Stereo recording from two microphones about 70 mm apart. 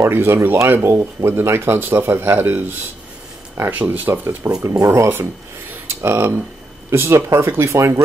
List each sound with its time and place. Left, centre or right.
0.0 s speech: right
4.6 s speech: right